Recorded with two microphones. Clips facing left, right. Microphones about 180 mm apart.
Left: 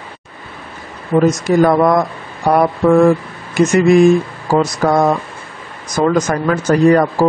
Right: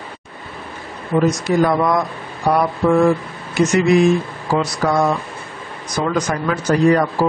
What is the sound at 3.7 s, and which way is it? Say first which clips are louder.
Speech: left 5 dB; 50° left (ahead or behind).